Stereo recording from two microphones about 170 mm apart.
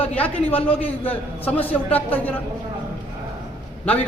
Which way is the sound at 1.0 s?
10° left (ahead or behind).